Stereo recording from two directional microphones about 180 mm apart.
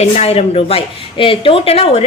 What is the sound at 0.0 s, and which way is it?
A woman's voice, 35° left (ahead or behind).